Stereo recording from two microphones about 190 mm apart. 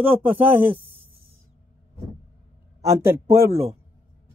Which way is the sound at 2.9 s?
15° right (ahead or behind).